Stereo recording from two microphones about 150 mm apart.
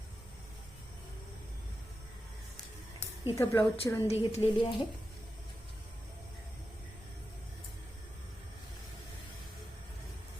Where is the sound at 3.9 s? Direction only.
15° left (ahead or behind).